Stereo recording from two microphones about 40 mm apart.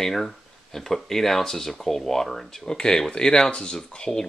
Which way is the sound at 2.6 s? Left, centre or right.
Left.